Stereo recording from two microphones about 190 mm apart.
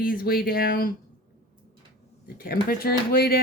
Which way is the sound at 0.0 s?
50° left (ahead or behind).